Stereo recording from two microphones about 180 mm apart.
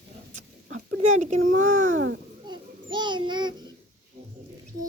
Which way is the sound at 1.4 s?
90° right.